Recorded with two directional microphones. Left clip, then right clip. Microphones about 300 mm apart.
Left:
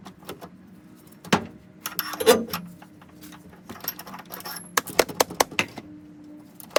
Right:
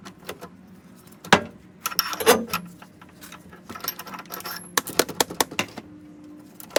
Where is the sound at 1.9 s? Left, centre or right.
Centre.